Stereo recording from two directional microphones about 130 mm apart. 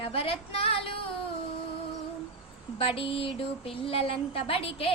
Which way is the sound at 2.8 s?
45° left (ahead or behind).